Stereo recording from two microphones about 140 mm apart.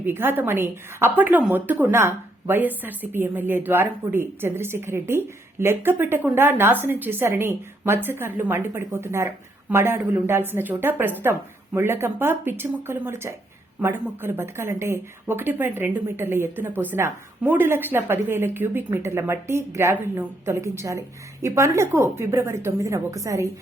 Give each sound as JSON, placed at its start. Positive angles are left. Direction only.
{"t": 0.0, "sound": "a woman's voice", "side_deg": -15}